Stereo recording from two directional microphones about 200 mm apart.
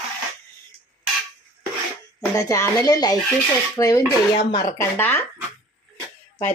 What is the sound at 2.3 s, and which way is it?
Speech, 15° left (ahead or behind).